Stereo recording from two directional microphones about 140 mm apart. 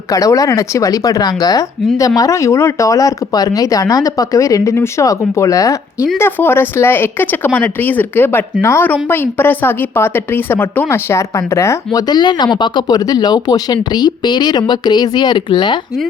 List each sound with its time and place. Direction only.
0.1 s a woman's voice: 25° left (ahead or behind)